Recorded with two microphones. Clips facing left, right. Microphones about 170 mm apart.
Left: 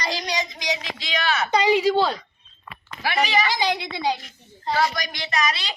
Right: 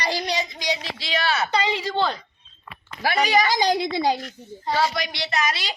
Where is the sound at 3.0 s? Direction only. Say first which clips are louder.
Right 2 dB; 40° right (ahead or behind).